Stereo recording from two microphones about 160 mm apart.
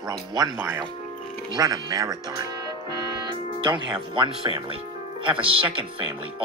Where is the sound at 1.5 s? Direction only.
25° right (ahead or behind).